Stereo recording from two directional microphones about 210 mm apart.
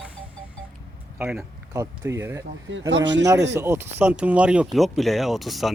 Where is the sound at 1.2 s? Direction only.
10° right (ahead or behind).